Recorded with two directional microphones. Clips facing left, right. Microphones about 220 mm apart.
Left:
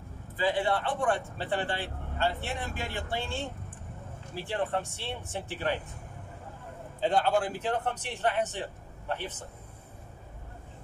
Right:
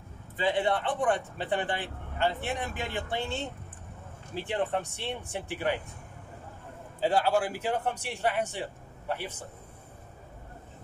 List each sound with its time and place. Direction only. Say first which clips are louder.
0.4 s speech: right 1 dB; 20° right (ahead or behind)
7.0 s speech: right 1 dB; 5° right (ahead or behind)